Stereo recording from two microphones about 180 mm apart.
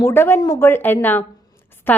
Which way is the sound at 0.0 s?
15° left (ahead or behind).